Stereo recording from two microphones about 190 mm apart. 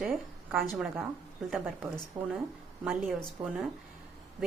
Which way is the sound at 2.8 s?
Centre (ahead or behind).